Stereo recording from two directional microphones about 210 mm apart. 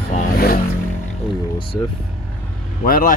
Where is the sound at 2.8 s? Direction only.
45° left (ahead or behind).